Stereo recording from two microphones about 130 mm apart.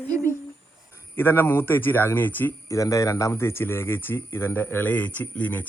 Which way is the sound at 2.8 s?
25° left (ahead or behind).